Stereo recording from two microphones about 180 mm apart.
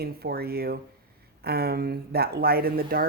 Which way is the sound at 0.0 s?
60° right (ahead or behind).